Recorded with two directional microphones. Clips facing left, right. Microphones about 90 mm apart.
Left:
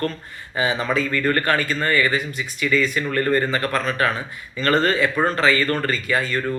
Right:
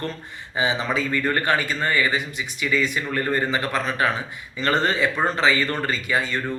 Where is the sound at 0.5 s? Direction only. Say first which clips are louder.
Left 2 dB; 20° right (ahead or behind).